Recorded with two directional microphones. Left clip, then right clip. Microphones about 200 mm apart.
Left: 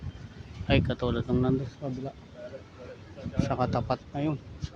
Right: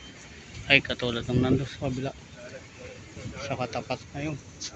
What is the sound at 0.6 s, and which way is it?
Speech, 15° left (ahead or behind).